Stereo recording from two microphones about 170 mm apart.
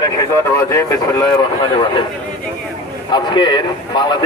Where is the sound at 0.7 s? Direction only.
20° left (ahead or behind).